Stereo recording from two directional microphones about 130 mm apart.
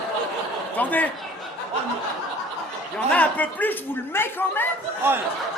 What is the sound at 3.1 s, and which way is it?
A man's voice, 10° left (ahead or behind).